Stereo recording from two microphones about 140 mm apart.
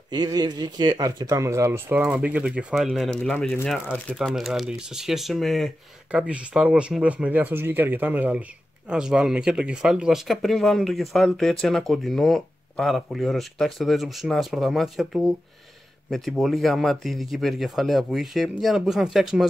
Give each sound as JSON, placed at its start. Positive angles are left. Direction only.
{"t": 0.1, "sound": "speech", "side_deg": -30}
{"t": 2.0, "sound": "speech", "side_deg": -5}